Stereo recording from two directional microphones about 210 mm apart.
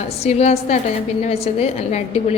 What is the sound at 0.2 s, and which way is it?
A woman's voice, 30° left (ahead or behind).